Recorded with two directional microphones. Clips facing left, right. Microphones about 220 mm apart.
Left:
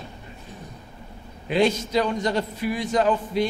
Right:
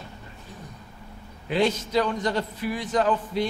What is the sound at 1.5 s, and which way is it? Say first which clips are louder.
A man's voice: left 2 dB; 15° left (ahead or behind).